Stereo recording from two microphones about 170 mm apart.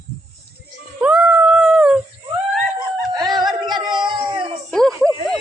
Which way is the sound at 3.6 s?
25° right (ahead or behind).